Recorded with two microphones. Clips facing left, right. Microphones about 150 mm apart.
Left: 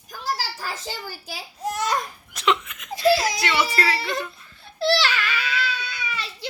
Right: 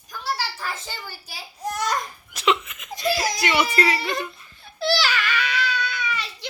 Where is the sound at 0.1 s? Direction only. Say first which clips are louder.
Even; 40° left (ahead or behind).